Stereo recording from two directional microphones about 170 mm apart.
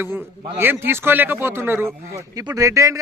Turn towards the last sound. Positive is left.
turn(degrees=-20)  # may be behind; listen again after turning